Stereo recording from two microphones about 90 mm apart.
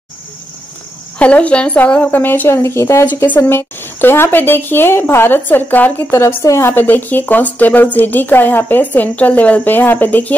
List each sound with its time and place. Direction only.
1.1 s speech: 15° left (ahead or behind)
6.1 s a woman's voice: 35° left (ahead or behind)
6.7 s speech: 20° left (ahead or behind)